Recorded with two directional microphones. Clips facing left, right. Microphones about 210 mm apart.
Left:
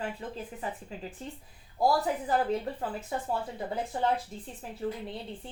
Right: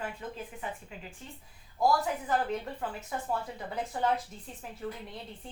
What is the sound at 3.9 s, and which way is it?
Speech, 30° left (ahead or behind).